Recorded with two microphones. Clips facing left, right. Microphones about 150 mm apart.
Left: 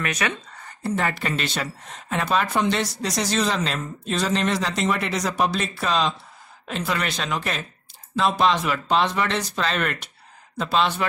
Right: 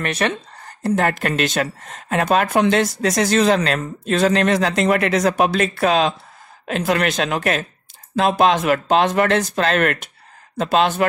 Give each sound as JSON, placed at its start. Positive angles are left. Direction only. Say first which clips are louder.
{"t": 0.1, "sound": "speech", "louder": "right 5 dB", "side_deg": -35}
{"t": 5.6, "sound": "speech", "louder": "right 7 dB", "side_deg": -65}
{"t": 7.1, "sound": "speech", "louder": "right 7 dB", "side_deg": -85}
{"t": 8.2, "sound": "speech", "louder": "right 4 dB", "side_deg": -55}